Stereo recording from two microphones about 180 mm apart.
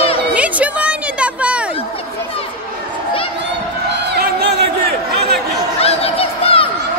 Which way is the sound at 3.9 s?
65° right (ahead or behind).